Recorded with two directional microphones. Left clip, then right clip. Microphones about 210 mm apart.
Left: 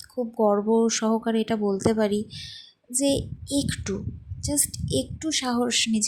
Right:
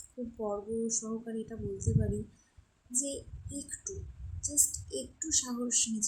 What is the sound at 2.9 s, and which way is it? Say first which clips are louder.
A woman's voice: left 13 dB; 35° left (ahead or behind).